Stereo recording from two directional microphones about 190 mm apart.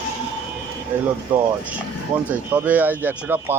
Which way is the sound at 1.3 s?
5° right (ahead or behind).